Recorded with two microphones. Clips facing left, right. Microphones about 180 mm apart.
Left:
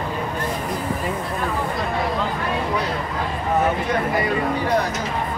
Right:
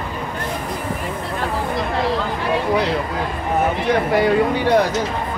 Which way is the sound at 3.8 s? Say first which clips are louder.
Right 5 dB; 85° right.